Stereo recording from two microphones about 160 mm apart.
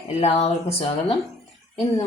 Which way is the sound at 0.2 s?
45° left (ahead or behind).